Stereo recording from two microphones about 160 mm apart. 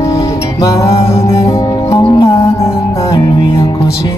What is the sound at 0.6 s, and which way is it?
Music, 20° left (ahead or behind).